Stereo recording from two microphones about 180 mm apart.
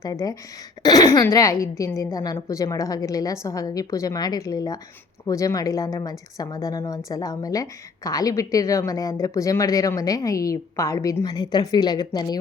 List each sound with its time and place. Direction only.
0.0 s a woman's voice: 20° left (ahead or behind)